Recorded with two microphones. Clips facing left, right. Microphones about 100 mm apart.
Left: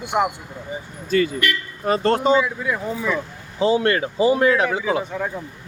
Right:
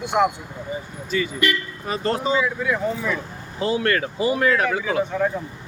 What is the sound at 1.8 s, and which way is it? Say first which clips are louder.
Speech: left 7 dB; 40° left (ahead or behind).